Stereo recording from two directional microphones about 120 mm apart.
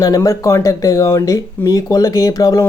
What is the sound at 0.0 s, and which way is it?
Speech, 30° left (ahead or behind).